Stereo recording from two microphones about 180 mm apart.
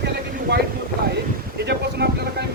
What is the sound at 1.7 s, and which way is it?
Speech, 65° right (ahead or behind).